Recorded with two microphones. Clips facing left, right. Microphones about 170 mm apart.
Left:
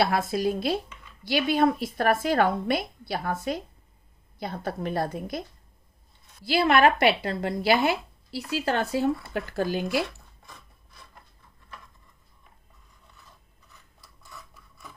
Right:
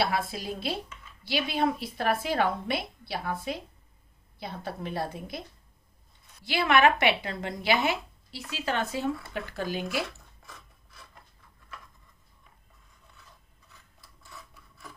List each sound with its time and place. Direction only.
0.0 s a woman's voice: 45° left (ahead or behind)
6.4 s speech: 30° left (ahead or behind)